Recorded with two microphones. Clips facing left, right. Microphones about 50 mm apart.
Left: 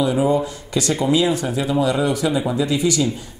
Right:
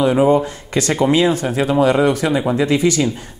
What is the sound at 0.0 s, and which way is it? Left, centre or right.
Speech, right.